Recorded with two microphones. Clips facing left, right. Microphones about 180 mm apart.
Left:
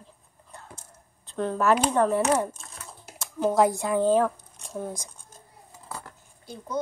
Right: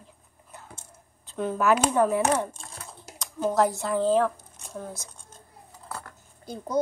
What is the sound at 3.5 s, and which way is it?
Speech, 10° left (ahead or behind).